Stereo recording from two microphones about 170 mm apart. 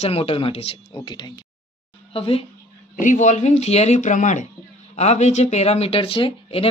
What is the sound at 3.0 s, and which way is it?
Speech, 45° left (ahead or behind).